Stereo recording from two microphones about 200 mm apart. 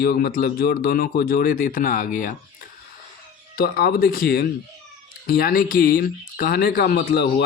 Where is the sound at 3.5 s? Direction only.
50° left (ahead or behind).